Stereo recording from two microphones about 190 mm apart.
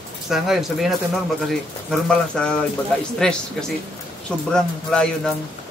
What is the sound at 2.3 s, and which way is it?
Speech, 5° left (ahead or behind).